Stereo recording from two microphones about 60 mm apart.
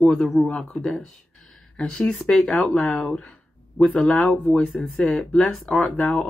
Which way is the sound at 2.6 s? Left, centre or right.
Centre.